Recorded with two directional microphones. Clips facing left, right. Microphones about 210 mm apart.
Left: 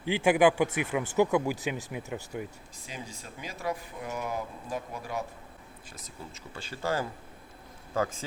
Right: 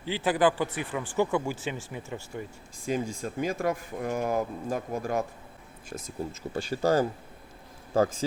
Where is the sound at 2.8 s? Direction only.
45° right (ahead or behind).